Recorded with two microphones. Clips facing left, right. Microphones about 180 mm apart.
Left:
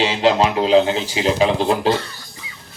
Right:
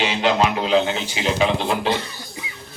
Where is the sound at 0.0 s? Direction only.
35° left (ahead or behind).